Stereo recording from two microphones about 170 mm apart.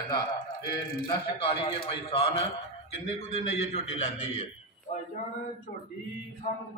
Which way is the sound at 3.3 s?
40° left (ahead or behind).